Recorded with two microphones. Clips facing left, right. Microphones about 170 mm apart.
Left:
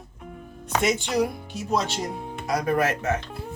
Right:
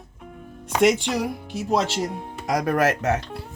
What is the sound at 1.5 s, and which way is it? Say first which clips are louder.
Speech: right 5 dB; 80° right.